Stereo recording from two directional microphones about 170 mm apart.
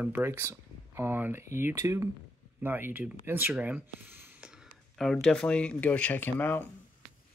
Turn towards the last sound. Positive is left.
turn(degrees=10)  # may be behind; listen again after turning